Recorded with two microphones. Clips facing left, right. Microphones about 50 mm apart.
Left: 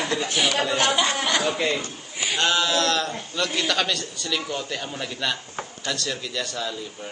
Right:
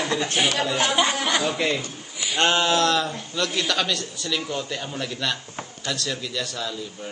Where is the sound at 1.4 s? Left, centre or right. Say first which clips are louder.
Even; centre.